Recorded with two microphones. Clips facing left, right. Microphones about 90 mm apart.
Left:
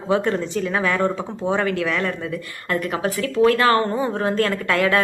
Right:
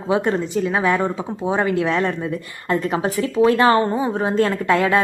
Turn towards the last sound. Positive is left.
turn(degrees=-25)  # may be behind; listen again after turning